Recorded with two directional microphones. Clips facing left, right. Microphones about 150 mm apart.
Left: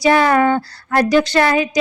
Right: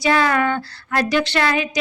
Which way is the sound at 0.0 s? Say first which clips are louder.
Left 5 dB; 35° left (ahead or behind).